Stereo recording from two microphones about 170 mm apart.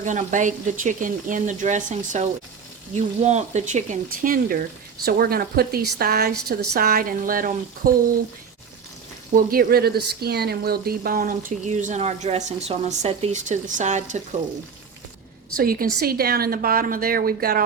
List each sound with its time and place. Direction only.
0.0 s speech: 45° right (ahead or behind)
5.0 s a woman's voice: 65° right (ahead or behind)
9.3 s speech: 60° right (ahead or behind)
15.5 s a woman's voice: 60° right (ahead or behind)